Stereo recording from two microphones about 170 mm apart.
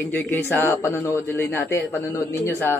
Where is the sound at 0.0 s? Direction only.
10° left (ahead or behind).